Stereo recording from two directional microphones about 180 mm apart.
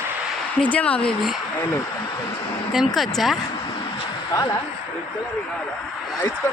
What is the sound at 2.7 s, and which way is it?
Speech, centre (ahead or behind).